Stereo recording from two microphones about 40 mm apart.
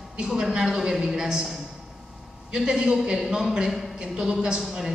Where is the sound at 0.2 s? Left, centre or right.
Centre.